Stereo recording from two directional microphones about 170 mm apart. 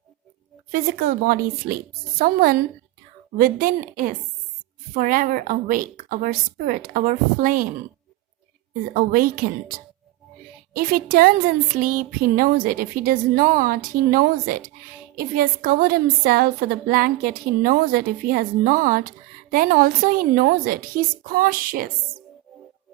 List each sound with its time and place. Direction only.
0.7 s a woman's voice: 60° right (ahead or behind)
8.9 s a woman's voice: 55° right (ahead or behind)
10.8 s a woman's voice: 55° right (ahead or behind)